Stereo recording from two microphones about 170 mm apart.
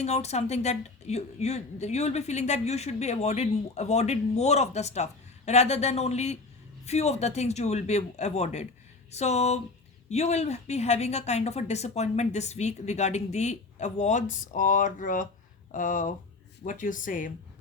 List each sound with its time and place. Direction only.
0.0 s a woman's voice: 40° left (ahead or behind)